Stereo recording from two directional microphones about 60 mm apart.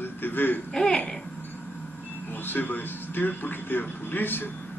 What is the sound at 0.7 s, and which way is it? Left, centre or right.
Speech, centre.